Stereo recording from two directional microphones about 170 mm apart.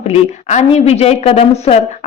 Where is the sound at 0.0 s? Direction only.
40° left (ahead or behind).